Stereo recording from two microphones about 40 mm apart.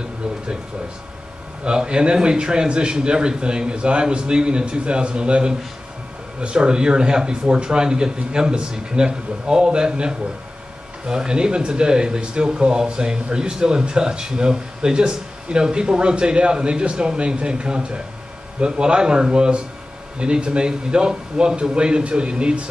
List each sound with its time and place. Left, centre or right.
1.6 s speech: right